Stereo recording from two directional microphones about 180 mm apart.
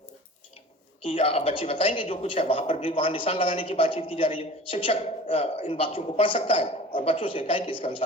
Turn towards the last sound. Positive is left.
turn(degrees=30)  # may be behind; listen again after turning